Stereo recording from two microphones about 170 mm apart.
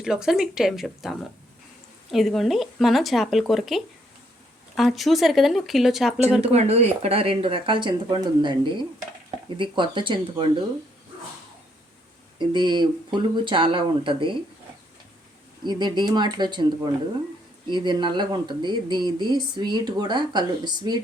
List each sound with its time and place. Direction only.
0.0 s speech: 5° right (ahead or behind)
6.4 s speech: 40° right (ahead or behind)
12.4 s speech: 25° right (ahead or behind)
15.6 s speech: 25° right (ahead or behind)